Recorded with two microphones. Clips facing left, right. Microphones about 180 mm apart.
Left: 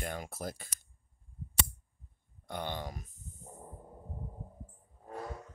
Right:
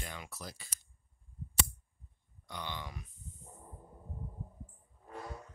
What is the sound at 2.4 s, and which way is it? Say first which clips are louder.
Speech: left 5 dB; 50° left (ahead or behind).